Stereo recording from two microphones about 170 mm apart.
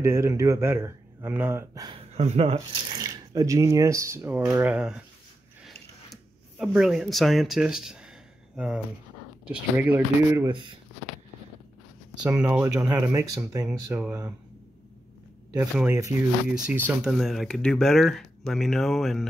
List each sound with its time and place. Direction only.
0.0 s speech: 15° right (ahead or behind)
1.9 s speech: 35° right (ahead or behind); by 5.0 s 5° right (ahead or behind)
6.6 s speech: 5° right (ahead or behind)
12.4 s speech: 10° right (ahead or behind)
15.5 s speech: 5° right (ahead or behind)